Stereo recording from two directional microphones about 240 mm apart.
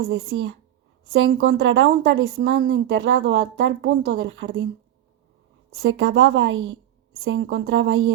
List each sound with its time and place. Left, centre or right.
0.0 s speech: right
5.7 s speech: right